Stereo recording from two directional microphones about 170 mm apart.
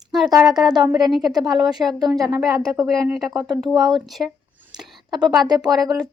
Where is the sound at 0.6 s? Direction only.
25° right (ahead or behind).